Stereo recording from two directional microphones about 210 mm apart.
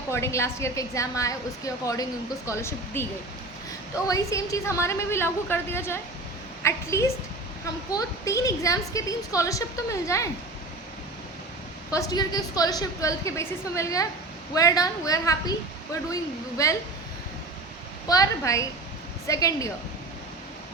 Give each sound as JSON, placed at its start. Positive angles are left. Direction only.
{"t": 0.1, "sound": "a woman's voice", "side_deg": 10}
{"t": 4.1, "sound": "a woman's voice", "side_deg": 15}
{"t": 11.9, "sound": "a woman's voice", "side_deg": 15}
{"t": 16.6, "sound": "a woman's voice", "side_deg": 15}
{"t": 18.1, "sound": "a woman's voice", "side_deg": 15}